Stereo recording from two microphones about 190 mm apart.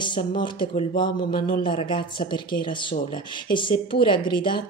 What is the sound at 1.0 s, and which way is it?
Speech, 50° left (ahead or behind).